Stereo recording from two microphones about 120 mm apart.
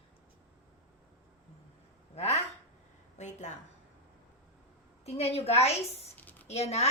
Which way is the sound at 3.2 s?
80° left.